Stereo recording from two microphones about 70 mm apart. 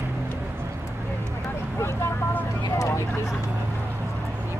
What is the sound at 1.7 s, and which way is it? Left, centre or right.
Speech, left.